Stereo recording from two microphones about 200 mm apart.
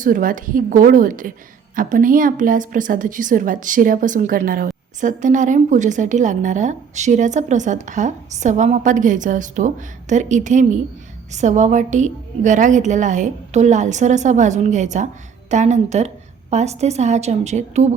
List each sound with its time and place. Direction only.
0.0 s a woman's voice: 45° right (ahead or behind)